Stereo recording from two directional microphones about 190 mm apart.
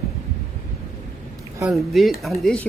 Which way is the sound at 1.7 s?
Centre (ahead or behind).